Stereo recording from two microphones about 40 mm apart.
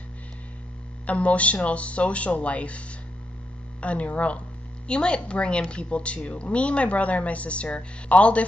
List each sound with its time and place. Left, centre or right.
1.0 s a woman's voice: left